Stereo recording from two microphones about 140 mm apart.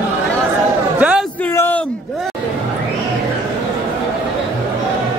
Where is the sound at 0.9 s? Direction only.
10° right (ahead or behind).